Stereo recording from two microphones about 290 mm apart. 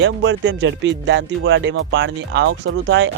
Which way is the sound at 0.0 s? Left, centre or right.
Right.